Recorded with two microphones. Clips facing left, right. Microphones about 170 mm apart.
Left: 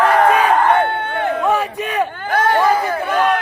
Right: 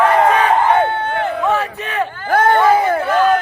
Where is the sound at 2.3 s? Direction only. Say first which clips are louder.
Right 5 dB; 50° right (ahead or behind).